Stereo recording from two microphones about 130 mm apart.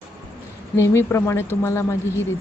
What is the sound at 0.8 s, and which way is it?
Speech, 20° left (ahead or behind).